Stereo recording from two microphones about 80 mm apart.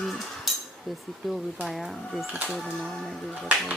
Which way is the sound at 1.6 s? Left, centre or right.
Centre.